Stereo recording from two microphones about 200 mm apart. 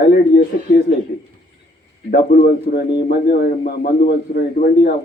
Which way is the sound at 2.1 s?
50° left (ahead or behind).